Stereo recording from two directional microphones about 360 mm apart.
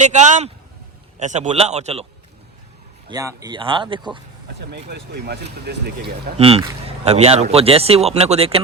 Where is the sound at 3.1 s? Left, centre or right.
Centre.